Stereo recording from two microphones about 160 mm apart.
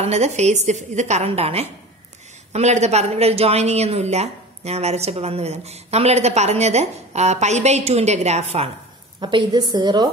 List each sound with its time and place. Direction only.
0.0 s speech: 45° right (ahead or behind)
9.2 s a woman's voice: 30° right (ahead or behind)